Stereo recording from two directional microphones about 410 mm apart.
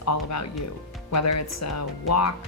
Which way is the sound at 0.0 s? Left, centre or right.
Left.